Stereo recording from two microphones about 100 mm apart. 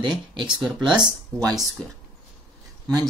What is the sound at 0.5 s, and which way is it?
Speech, 5° right (ahead or behind).